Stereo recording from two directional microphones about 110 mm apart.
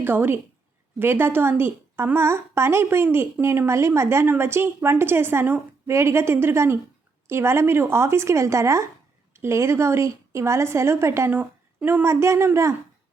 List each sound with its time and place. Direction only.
0.0 s a woman's voice: 20° right (ahead or behind)